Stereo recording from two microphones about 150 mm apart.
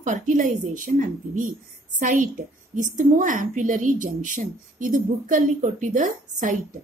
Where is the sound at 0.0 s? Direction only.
55° right (ahead or behind).